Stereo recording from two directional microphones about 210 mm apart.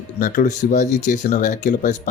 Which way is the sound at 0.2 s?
35° left (ahead or behind).